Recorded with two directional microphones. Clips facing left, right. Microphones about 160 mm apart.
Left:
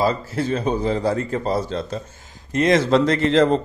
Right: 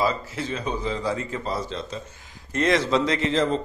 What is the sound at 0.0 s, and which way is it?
A man's voice, 45° left (ahead or behind).